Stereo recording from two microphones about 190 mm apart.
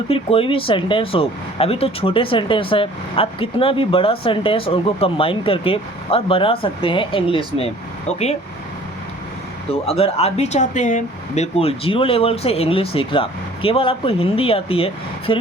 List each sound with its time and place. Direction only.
0.1 s speech: 30° left (ahead or behind)
9.8 s speech: 30° left (ahead or behind)